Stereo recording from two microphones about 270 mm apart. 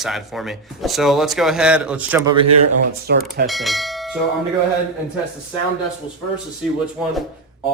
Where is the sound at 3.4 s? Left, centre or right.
Centre.